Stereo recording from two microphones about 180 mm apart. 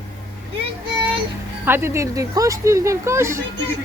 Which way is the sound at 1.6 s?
15° right (ahead or behind).